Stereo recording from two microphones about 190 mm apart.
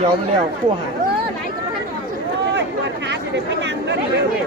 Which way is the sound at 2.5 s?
65° right (ahead or behind).